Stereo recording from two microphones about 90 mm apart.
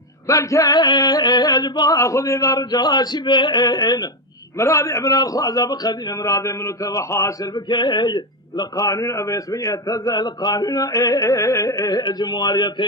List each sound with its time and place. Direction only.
0.3 s a man's voice: 40° left (ahead or behind)
2.0 s a man's voice: 35° left (ahead or behind)
4.5 s a man's voice: 35° left (ahead or behind)
7.5 s speech: 55° left (ahead or behind)
8.7 s a man's voice: 40° left (ahead or behind)